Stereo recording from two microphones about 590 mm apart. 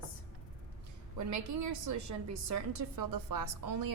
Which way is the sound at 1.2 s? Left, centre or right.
Right.